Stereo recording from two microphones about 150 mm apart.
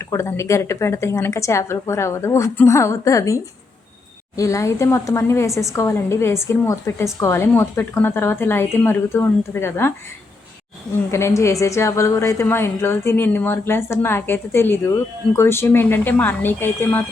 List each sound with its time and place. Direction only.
0.0 s a woman's voice: 20° left (ahead or behind)
11.1 s a woman's voice: 20° left (ahead or behind)